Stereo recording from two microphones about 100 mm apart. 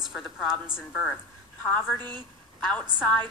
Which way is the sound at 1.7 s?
15° left (ahead or behind).